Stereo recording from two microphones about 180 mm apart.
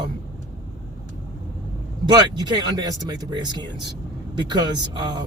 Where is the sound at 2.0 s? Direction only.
25° right (ahead or behind).